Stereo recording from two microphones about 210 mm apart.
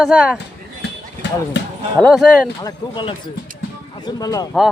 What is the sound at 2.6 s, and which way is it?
Speech, 20° left (ahead or behind).